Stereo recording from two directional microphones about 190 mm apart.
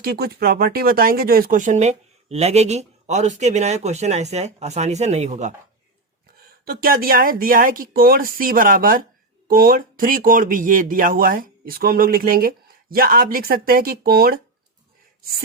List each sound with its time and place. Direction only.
0.0 s speech: 55° right (ahead or behind); by 5.5 s 35° right (ahead or behind)
6.7 s speech: 50° right (ahead or behind)